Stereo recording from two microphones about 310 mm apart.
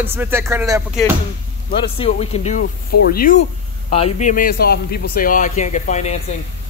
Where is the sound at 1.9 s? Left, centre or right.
Centre.